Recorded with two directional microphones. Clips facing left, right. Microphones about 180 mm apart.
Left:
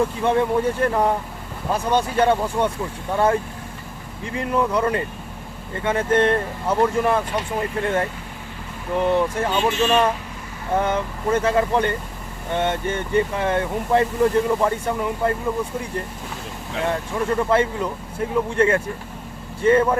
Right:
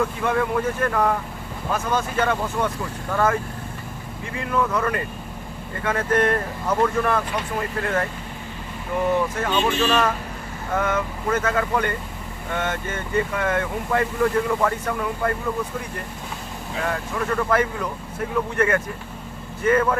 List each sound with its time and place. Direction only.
0.0 s speech: 25° left (ahead or behind)
4.4 s speech: 30° left (ahead or behind)
9.0 s speech: 30° left (ahead or behind)
16.8 s speech: 25° left (ahead or behind)